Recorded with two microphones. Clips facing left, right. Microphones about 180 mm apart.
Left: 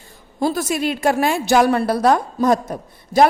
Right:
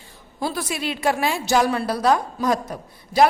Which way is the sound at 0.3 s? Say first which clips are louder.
Left 6 dB; 45° left (ahead or behind).